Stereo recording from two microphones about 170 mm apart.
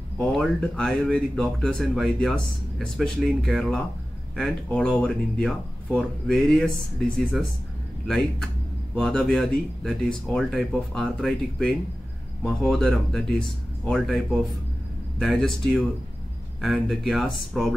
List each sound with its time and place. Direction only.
0.2 s speech: 5° left (ahead or behind)
8.9 s speech: 5° left (ahead or behind)